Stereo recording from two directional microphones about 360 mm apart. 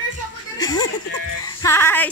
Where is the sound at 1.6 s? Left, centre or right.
Centre.